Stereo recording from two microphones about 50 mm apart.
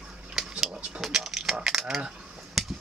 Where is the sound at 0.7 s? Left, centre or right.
Right.